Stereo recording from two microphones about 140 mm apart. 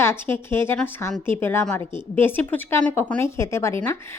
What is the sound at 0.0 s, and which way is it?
A woman's voice, 15° left (ahead or behind).